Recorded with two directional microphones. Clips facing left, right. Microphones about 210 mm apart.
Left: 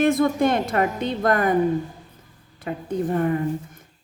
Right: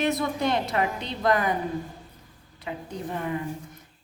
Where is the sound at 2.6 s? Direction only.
50° left (ahead or behind).